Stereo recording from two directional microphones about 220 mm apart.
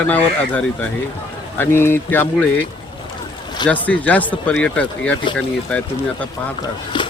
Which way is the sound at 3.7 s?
5° left (ahead or behind).